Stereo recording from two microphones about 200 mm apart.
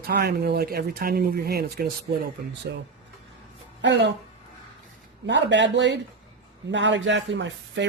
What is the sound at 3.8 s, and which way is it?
Speech, 60° right (ahead or behind).